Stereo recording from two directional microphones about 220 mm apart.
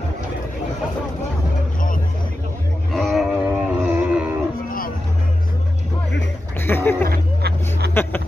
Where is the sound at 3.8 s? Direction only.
5° right (ahead or behind).